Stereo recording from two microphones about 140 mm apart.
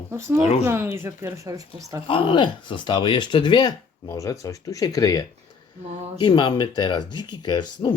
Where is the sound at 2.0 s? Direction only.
40° left (ahead or behind).